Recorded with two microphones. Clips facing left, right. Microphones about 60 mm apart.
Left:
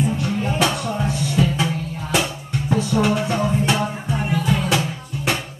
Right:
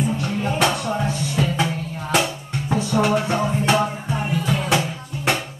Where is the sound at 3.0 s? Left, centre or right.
Right.